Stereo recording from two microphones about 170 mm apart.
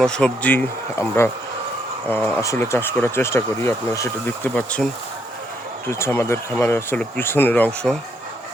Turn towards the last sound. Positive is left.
turn(degrees=10)  # may be behind; listen again after turning